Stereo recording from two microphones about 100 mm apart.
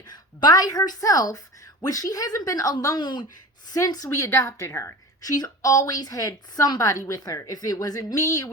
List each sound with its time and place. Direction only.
0.0 s a woman's voice: 40° left (ahead or behind)
2.8 s a woman's voice: 45° left (ahead or behind)